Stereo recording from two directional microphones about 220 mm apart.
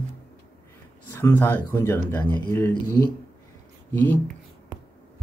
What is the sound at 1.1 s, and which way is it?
Speech, 10° left (ahead or behind).